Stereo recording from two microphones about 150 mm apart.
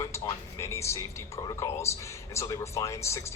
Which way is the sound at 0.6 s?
20° left (ahead or behind).